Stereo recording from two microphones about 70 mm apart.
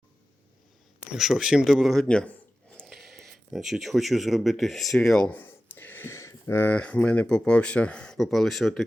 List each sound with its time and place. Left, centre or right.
1.0 s speech: centre
2.0 s speech: centre
2.7 s speech: centre
5.3 s a sound: left
6.1 s a sound: left
6.7 s speech: centre